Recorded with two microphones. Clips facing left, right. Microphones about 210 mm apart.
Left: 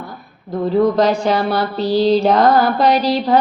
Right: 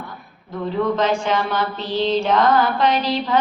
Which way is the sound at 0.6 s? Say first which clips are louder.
Left 6 dB; 40° left (ahead or behind).